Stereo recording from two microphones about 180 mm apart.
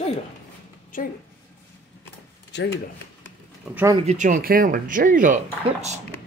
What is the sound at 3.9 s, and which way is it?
Speech, 40° right (ahead or behind).